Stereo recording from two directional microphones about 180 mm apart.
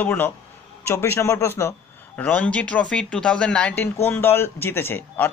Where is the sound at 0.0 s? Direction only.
10° left (ahead or behind).